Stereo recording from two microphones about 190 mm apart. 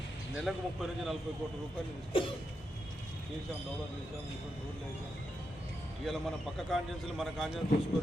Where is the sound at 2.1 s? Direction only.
25° left (ahead or behind).